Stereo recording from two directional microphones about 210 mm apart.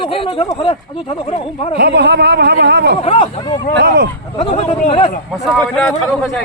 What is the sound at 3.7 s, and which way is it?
Speech, 55° right (ahead or behind).